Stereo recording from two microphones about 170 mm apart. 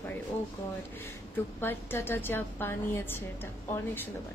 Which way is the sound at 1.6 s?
15° left (ahead or behind).